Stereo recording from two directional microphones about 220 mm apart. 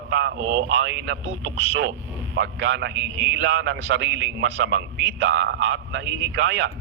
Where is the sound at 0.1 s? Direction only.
55° right (ahead or behind).